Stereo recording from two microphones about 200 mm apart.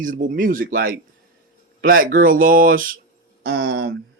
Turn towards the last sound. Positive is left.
turn(degrees=-55)  # may be behind; listen again after turning